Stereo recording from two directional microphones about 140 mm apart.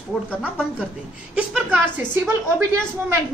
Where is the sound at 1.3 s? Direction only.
5° right (ahead or behind).